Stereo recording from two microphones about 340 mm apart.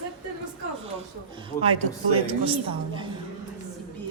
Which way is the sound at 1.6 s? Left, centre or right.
Right.